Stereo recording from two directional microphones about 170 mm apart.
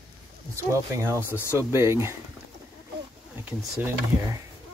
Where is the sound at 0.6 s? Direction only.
15° right (ahead or behind).